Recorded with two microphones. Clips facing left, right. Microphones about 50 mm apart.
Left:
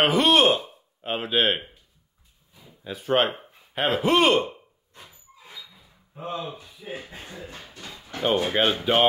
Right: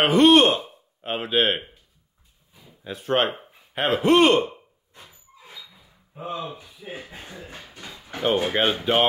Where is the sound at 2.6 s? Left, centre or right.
Centre.